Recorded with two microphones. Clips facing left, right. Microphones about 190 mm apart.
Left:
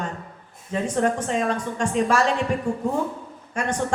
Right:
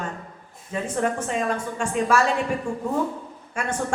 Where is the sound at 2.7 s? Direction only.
25° left (ahead or behind).